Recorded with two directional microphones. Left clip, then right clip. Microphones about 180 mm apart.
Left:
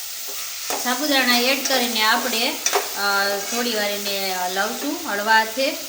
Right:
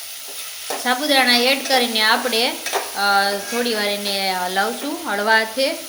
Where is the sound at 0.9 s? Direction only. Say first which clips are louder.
Right 3 dB; 35° right (ahead or behind).